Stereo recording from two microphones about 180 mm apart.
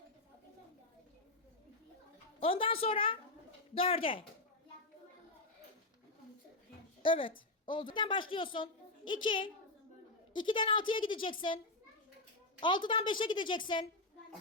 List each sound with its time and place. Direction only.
2.4 s a woman's voice: 30° left (ahead or behind)
7.0 s a woman's voice: 30° left (ahead or behind)